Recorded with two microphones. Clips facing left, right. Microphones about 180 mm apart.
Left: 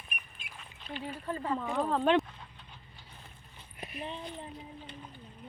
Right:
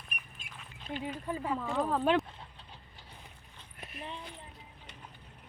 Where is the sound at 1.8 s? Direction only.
5° right (ahead or behind).